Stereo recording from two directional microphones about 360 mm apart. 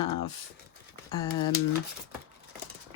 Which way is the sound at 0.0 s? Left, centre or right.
Centre.